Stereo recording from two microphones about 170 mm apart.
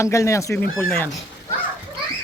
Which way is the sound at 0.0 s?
15° left (ahead or behind).